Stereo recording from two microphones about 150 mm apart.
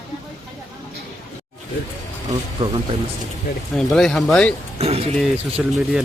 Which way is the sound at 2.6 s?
35° right (ahead or behind).